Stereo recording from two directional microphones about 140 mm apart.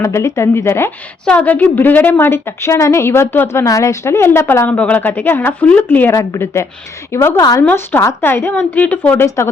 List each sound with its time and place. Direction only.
0.0 s a woman's voice: 20° left (ahead or behind)
7.6 s a woman's voice: 10° left (ahead or behind)